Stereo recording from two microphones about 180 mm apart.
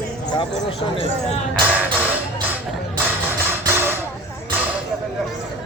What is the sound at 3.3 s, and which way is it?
Music, 10° right (ahead or behind).